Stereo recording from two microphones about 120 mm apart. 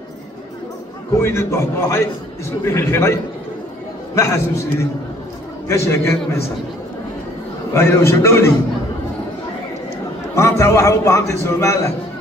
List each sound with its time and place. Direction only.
1.2 s a man's voice: 20° left (ahead or behind)
7.7 s a man's voice: 20° left (ahead or behind)
10.3 s a man's voice: 25° left (ahead or behind)